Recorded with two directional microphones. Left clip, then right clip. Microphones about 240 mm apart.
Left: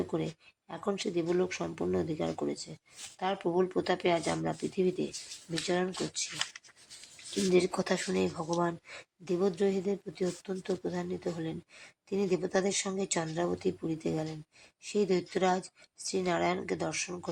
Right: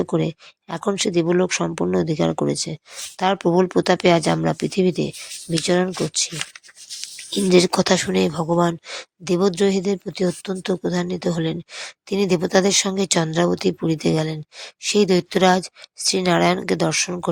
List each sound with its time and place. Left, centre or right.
0.1 s speech: right
7.5 s speech: right